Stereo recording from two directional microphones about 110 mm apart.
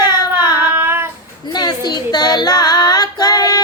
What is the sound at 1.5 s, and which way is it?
Female singing, 40° left (ahead or behind).